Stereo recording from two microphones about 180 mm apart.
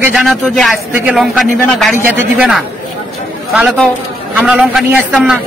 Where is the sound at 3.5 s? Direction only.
Centre (ahead or behind).